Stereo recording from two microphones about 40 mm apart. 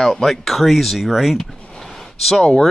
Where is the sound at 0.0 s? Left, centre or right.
Centre.